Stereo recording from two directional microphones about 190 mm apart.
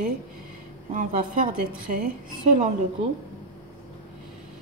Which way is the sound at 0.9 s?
45° right (ahead or behind).